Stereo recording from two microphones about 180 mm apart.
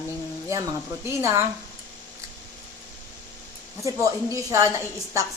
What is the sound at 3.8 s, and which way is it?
Speech, 15° right (ahead or behind).